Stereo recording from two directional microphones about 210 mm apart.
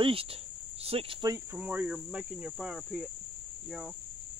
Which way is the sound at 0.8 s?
25° right (ahead or behind).